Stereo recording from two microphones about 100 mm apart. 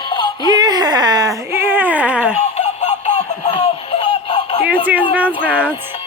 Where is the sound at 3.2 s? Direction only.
90° left.